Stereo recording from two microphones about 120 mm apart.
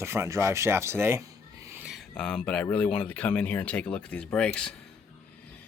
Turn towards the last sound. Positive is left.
turn(degrees=5)  # may be behind; listen again after turning